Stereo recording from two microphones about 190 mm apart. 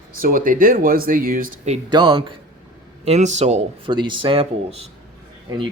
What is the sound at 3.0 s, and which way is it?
Speech, 35° right (ahead or behind).